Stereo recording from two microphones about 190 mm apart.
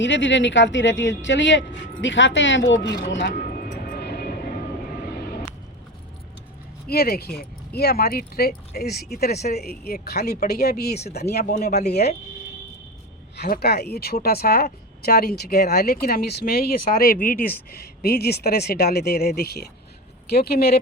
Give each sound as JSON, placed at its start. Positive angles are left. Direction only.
{"t": 0.0, "sound": "speech", "side_deg": 75}
{"t": 3.1, "sound": "vehicle", "side_deg": 65}
{"t": 6.8, "sound": "speech", "side_deg": 55}
{"t": 13.3, "sound": "speech", "side_deg": 60}